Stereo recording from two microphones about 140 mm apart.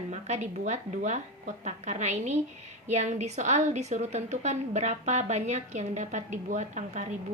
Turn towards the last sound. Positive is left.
turn(degrees=-60)  # may be behind; listen again after turning